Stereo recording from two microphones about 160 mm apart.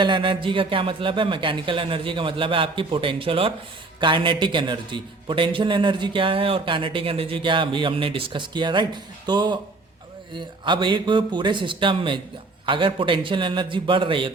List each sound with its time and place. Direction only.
0.0 s a man's voice: 30° right (ahead or behind)